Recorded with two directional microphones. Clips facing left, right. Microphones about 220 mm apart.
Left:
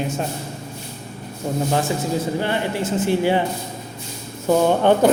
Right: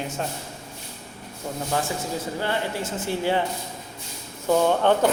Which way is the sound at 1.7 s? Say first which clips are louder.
Left 3 dB; 20° left (ahead or behind).